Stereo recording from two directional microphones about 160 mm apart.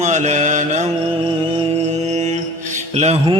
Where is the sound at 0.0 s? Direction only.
50° right (ahead or behind).